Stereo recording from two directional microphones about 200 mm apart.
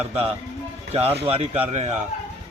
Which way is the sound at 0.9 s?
30° right (ahead or behind).